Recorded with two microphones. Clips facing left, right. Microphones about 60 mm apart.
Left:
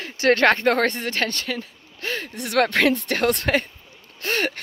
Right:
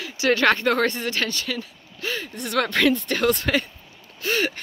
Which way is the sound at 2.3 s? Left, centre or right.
Left.